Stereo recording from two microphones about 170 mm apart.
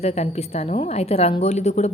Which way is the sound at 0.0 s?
35° left (ahead or behind).